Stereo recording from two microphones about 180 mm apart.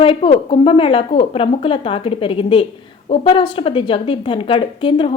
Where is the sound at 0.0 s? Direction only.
30° left (ahead or behind).